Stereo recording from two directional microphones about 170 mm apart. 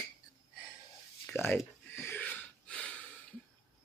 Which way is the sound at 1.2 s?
10° left (ahead or behind).